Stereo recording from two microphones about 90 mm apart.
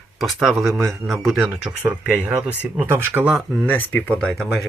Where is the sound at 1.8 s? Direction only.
15° right (ahead or behind).